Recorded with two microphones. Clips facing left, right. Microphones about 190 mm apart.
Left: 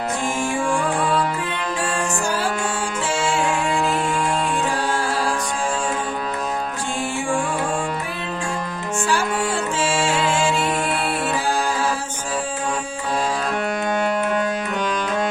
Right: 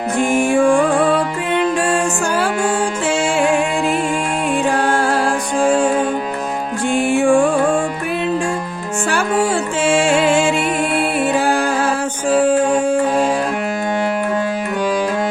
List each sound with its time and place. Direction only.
2.2 s music: 60° right (ahead or behind)
4.7 s music: 55° right (ahead or behind)
6.9 s music: 60° right (ahead or behind)
9.8 s music: 55° right (ahead or behind)